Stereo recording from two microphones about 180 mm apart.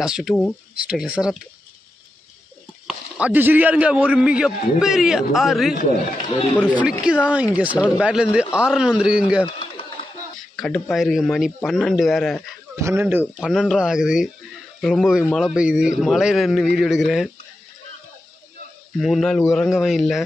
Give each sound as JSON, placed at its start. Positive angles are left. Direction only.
{"t": 0.0, "sound": "speech", "side_deg": -5}
{"t": 2.9, "sound": "a man's voice", "side_deg": -5}
{"t": 5.8, "sound": "speech", "side_deg": 55}
{"t": 6.6, "sound": "speech", "side_deg": -5}
{"t": 9.5, "sound": "a sound", "side_deg": 30}
{"t": 10.5, "sound": "speech", "side_deg": 0}
{"t": 12.8, "sound": "a man's voice", "side_deg": -10}
{"t": 13.4, "sound": "speech", "side_deg": 0}
{"t": 18.9, "sound": "speech", "side_deg": 0}